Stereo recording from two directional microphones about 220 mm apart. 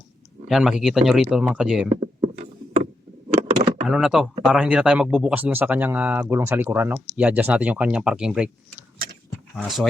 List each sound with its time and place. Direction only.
0.4 s speech: centre (ahead or behind)
1.9 s rowboat: 30° right (ahead or behind)
3.8 s a man's voice: centre (ahead or behind)
9.6 s speech: centre (ahead or behind)